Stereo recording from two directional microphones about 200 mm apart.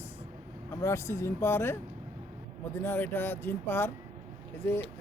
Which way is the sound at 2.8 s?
10° left (ahead or behind).